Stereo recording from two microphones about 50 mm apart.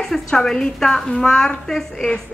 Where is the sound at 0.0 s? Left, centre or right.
Centre.